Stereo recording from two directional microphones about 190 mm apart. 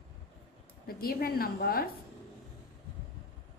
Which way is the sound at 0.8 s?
50° left (ahead or behind).